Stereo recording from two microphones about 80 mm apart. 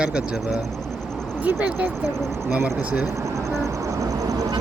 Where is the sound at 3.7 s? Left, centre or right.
Right.